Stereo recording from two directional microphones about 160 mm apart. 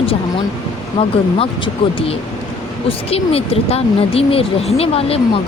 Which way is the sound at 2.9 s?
40° left (ahead or behind).